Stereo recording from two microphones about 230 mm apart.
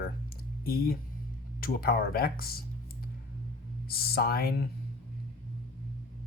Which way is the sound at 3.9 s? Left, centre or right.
Left.